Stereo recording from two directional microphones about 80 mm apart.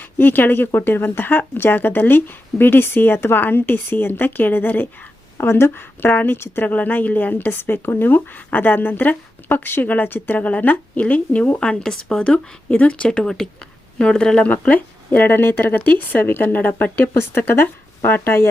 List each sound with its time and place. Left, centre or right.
0.0 s a woman's voice: left